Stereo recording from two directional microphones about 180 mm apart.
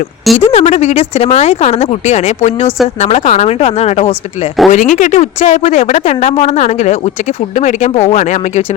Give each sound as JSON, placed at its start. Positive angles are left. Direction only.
{"t": 0.3, "sound": "a woman's voice", "side_deg": 35}